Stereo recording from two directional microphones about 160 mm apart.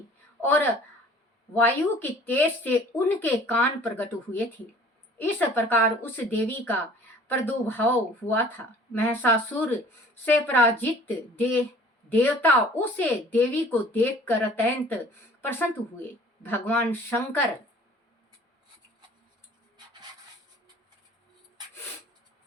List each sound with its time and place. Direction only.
0.4 s speech: 15° left (ahead or behind)
19.7 s dog: 30° right (ahead or behind)